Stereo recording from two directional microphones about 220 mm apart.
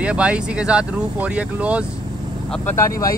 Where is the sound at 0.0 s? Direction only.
5° right (ahead or behind).